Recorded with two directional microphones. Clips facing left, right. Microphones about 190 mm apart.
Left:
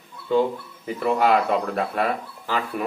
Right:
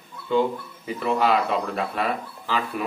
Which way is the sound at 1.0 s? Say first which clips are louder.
Left 2 dB; 50° left (ahead or behind).